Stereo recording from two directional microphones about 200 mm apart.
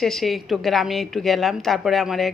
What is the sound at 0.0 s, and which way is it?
A woman's voice, centre (ahead or behind).